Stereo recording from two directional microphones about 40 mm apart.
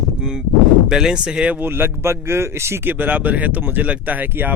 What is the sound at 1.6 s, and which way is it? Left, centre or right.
A man's voice, right.